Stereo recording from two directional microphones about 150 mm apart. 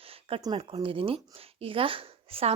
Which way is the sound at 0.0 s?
40° right (ahead or behind).